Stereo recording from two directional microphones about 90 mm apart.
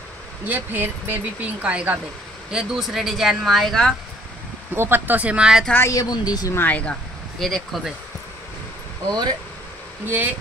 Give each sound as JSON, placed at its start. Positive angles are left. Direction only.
{"t": 0.5, "sound": "speech", "side_deg": -20}
{"t": 2.5, "sound": "speech", "side_deg": -5}
{"t": 4.7, "sound": "speech", "side_deg": -25}
{"t": 5.9, "sound": "a woman's voice", "side_deg": 45}
{"t": 6.5, "sound": "speech", "side_deg": 20}
{"t": 7.3, "sound": "speech", "side_deg": 0}
{"t": 10.0, "sound": "speech", "side_deg": -20}